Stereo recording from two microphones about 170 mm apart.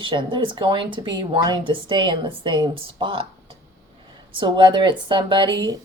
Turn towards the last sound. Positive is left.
turn(degrees=-25)  # may be behind; listen again after turning